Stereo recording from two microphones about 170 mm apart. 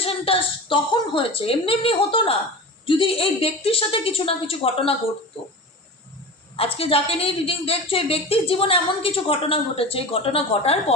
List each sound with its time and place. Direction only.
0.0 s a woman's voice: 35° left (ahead or behind)
6.6 s a woman's voice: 35° left (ahead or behind)